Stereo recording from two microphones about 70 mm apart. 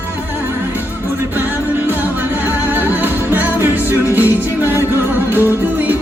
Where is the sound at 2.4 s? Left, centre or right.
Right.